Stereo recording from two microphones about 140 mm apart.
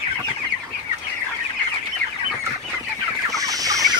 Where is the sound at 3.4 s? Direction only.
25° right (ahead or behind).